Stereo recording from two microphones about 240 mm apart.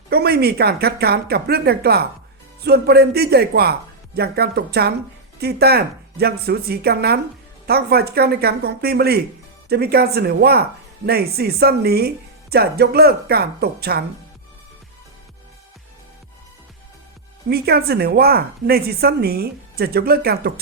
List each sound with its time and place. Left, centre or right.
0.1 s speech: right
17.5 s speech: right